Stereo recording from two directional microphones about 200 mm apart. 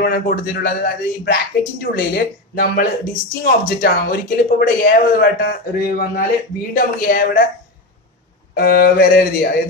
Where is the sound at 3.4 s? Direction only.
50° left (ahead or behind).